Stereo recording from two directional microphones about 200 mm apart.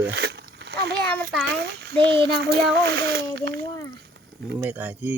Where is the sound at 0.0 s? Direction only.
55° right (ahead or behind).